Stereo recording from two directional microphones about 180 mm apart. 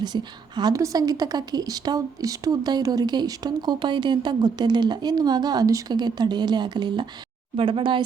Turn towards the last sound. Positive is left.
turn(degrees=-25)  # may be behind; listen again after turning